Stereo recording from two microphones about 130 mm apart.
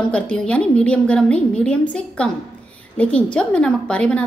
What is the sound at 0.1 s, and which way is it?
A woman's voice, 10° left (ahead or behind).